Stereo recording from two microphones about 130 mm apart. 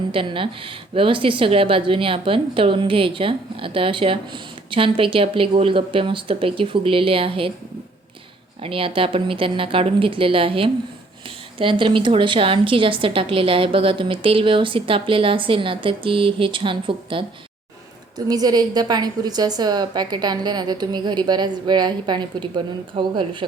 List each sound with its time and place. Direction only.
0.1 s a woman's voice: 45° right (ahead or behind)
8.6 s a woman's voice: 45° right (ahead or behind)
18.3 s a woman's voice: 30° right (ahead or behind)